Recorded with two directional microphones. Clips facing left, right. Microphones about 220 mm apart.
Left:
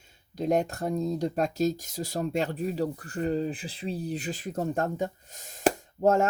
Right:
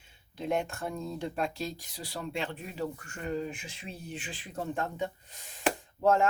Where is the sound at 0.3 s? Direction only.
40° left (ahead or behind).